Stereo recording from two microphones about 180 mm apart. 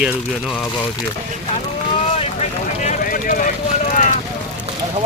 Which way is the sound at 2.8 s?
45° left (ahead or behind).